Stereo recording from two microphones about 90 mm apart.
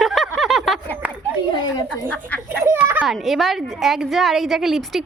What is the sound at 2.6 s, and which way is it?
Speech, 25° right (ahead or behind).